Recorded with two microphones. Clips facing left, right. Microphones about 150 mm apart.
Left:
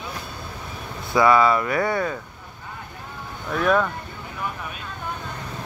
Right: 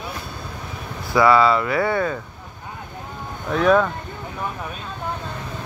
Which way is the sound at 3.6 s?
Centre (ahead or behind).